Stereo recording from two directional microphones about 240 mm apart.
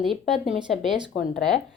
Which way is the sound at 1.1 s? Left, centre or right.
Left.